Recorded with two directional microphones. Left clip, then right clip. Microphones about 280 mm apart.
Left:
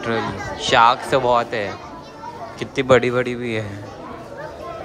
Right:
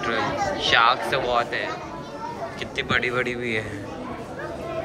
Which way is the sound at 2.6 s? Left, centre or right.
Left.